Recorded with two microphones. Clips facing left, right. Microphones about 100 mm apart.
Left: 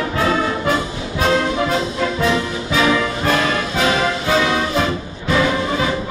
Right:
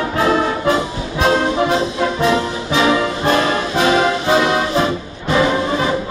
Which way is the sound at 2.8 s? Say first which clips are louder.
Right 2 dB; 30° right (ahead or behind).